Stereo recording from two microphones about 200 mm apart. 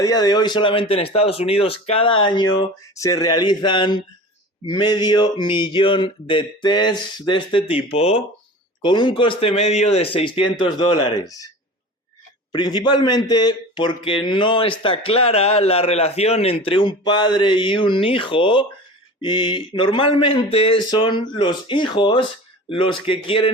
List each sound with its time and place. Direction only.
0.0 s a man's voice: 20° left (ahead or behind)
12.5 s a man's voice: 20° left (ahead or behind)